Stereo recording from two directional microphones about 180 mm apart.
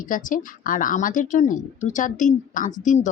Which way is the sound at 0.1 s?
50° left (ahead or behind).